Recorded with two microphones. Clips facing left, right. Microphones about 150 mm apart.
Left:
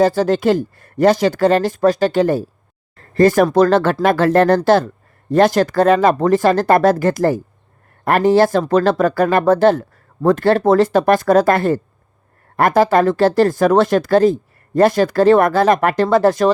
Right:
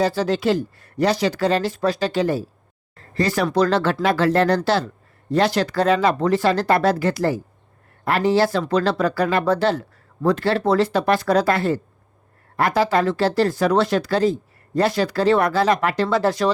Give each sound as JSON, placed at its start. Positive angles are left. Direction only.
{"t": 0.0, "sound": "speech", "side_deg": 45}